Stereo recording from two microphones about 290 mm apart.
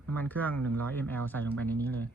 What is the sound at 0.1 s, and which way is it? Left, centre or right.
Speech, centre.